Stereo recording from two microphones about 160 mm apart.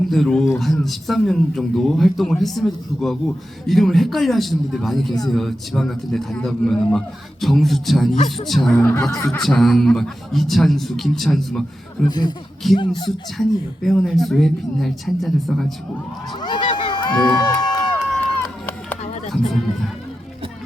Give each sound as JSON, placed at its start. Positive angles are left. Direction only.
{"t": 0.1, "sound": "a man's voice", "side_deg": 5}
{"t": 8.1, "sound": "speech", "side_deg": 45}
{"t": 8.4, "sound": "a man's voice", "side_deg": 0}
{"t": 8.7, "sound": "speech", "side_deg": 15}
{"t": 9.4, "sound": "a man's voice", "side_deg": 0}
{"t": 12.0, "sound": "speech", "side_deg": 25}
{"t": 13.8, "sound": "a man's voice", "side_deg": 0}
{"t": 16.4, "sound": "run", "side_deg": 30}
{"t": 18.0, "sound": "run", "side_deg": 5}